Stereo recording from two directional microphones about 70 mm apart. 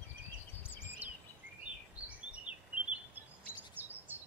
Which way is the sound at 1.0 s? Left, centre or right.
Right.